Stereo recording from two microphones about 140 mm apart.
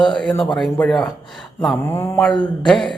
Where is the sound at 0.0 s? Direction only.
5° left (ahead or behind).